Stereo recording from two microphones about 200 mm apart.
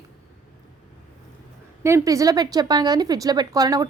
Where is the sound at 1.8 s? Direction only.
15° right (ahead or behind).